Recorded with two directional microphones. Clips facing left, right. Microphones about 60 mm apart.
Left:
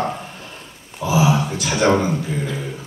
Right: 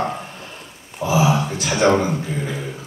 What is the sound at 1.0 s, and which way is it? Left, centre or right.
Speech, right.